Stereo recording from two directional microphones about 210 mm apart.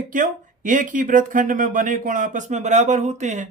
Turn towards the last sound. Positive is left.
turn(degrees=-35)  # may be behind; listen again after turning